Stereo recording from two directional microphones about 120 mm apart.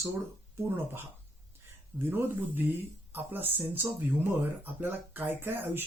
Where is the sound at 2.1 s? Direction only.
15° right (ahead or behind).